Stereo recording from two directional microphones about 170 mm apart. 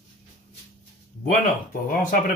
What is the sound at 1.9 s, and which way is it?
Speech, 50° left (ahead or behind).